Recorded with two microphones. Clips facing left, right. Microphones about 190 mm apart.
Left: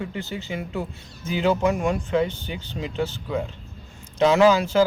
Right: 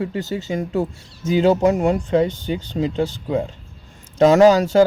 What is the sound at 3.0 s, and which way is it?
Speech, 30° right (ahead or behind).